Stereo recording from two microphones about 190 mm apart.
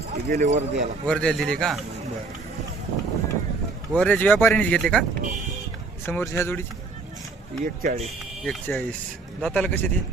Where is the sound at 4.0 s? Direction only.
10° left (ahead or behind).